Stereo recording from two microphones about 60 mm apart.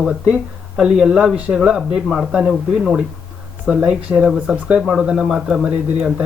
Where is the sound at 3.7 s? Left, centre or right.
Centre.